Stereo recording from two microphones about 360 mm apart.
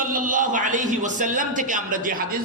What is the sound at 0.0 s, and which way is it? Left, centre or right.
A man's voice, right.